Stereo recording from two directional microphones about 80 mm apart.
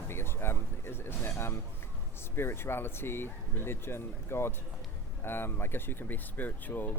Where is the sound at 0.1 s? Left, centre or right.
Left.